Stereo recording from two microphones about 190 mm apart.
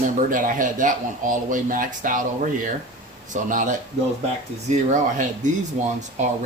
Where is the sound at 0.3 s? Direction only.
45° right (ahead or behind).